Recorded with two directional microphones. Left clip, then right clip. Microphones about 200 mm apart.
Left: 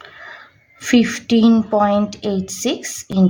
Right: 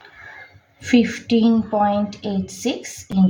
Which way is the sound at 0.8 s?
50° left (ahead or behind).